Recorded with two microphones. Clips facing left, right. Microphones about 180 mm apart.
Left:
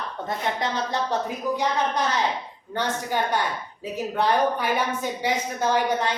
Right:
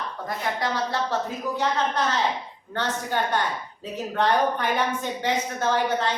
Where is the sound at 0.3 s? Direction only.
20° left (ahead or behind).